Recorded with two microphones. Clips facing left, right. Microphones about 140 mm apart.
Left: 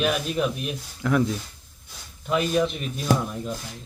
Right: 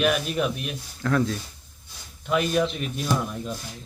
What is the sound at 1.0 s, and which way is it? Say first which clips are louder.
Speech: left 1 dB; 15° left (ahead or behind).